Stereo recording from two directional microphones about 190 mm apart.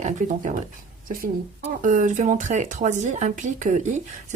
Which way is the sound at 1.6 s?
40° right (ahead or behind).